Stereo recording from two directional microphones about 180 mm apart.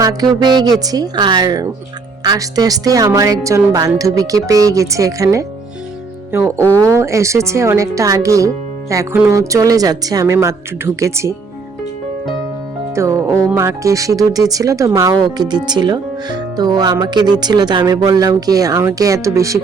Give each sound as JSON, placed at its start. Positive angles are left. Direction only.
{"t": 0.0, "sound": "speech", "side_deg": -20}
{"t": 6.7, "sound": "speech", "side_deg": -15}
{"t": 12.9, "sound": "speech", "side_deg": -15}